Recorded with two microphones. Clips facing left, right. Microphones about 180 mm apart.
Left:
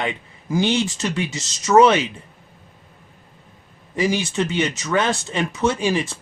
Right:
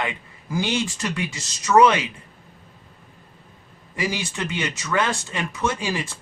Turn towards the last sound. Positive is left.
turn(degrees=25)  # may be behind; listen again after turning